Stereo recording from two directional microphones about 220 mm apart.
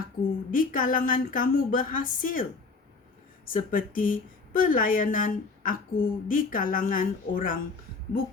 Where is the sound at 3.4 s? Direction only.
40° left (ahead or behind).